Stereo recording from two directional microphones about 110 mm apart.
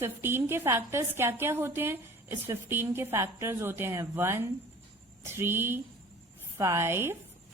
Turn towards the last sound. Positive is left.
turn(degrees=-20)  # may be behind; listen again after turning